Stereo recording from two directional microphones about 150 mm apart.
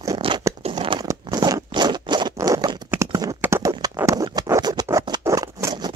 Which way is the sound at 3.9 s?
20° right (ahead or behind).